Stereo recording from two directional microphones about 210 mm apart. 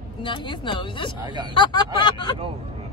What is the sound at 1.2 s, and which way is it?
Speech, 20° right (ahead or behind).